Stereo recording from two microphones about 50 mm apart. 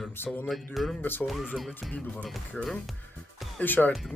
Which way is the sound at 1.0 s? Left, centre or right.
Left.